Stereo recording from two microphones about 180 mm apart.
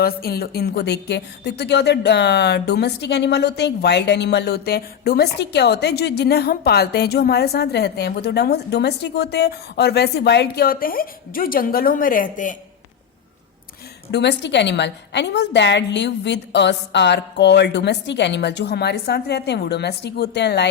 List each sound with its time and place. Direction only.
0.0 s a woman's voice: 60° left (ahead or behind)
14.1 s a woman's voice: 70° left (ahead or behind)